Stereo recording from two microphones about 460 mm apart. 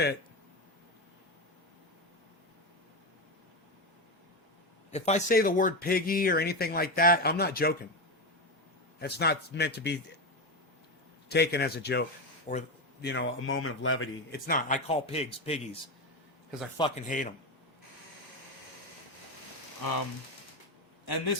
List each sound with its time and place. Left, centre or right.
4.9 s speech: centre
9.0 s speech: left
11.3 s speech: left
16.7 s speech: centre
19.8 s speech: left
21.0 s a man's voice: left